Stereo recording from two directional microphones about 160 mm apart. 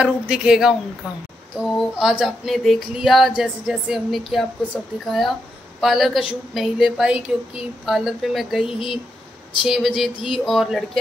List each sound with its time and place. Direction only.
0.0 s female singing: 5° right (ahead or behind)
1.8 s female singing: 5° right (ahead or behind)
5.0 s a woman's voice: centre (ahead or behind)
6.5 s female singing: centre (ahead or behind)